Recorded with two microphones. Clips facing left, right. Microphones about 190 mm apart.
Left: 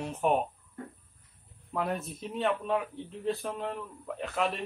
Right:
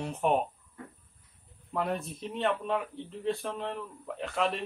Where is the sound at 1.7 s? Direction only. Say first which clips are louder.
Even; centre (ahead or behind).